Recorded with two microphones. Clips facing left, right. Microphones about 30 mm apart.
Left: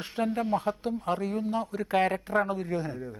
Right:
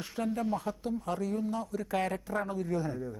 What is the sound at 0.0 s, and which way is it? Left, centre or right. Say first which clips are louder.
A man's voice: left 4 dB; left.